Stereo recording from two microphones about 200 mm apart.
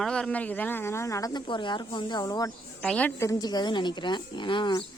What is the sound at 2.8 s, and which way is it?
A woman's voice, 5° left (ahead or behind).